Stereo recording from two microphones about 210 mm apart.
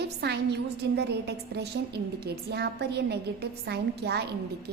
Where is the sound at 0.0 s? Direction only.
50° right (ahead or behind).